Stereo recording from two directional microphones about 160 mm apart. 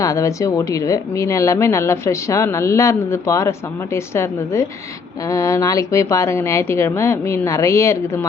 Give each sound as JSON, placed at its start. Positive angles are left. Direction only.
{"t": 0.0, "sound": "a woman's voice", "side_deg": 20}